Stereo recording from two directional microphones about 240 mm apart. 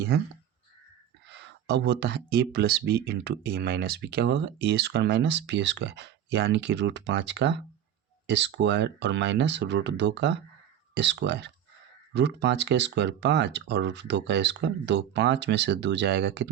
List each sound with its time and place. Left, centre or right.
1.3 s speech: right